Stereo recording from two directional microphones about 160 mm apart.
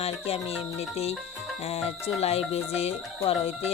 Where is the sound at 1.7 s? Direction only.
40° left (ahead or behind).